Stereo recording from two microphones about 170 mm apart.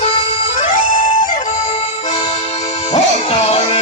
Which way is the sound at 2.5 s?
45° left (ahead or behind).